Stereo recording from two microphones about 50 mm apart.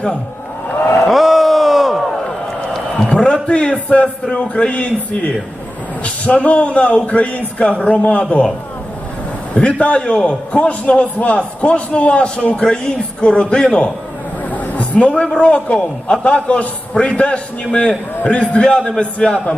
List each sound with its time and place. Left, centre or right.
1.0 s a sound: centre
3.2 s a man's voice: centre
9.6 s a man's voice: left